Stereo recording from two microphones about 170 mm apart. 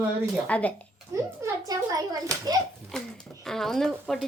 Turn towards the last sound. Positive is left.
turn(degrees=5)  # may be behind; listen again after turning